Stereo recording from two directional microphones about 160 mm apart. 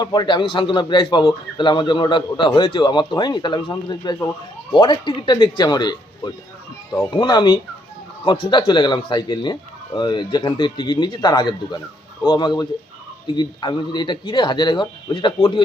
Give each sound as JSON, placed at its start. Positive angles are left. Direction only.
{"t": 0.0, "sound": "a man's voice", "side_deg": 25}